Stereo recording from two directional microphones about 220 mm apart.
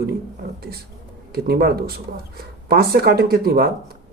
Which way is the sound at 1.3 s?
45° right (ahead or behind).